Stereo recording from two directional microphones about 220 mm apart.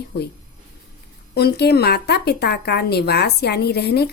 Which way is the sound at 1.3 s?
45° left (ahead or behind).